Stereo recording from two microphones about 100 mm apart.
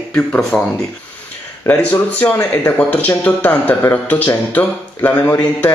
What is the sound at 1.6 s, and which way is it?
Speech, 20° left (ahead or behind).